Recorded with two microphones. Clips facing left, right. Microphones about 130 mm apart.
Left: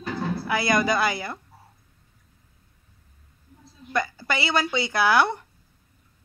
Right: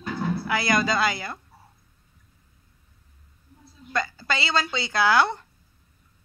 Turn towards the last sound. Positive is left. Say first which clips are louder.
# even
turn(degrees=20)  # may be behind; listen again after turning